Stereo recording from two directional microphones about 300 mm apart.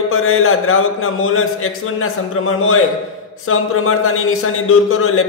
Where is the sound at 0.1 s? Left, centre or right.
Left.